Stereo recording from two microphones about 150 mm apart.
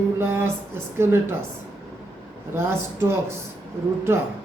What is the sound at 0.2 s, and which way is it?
Speech, 15° right (ahead or behind).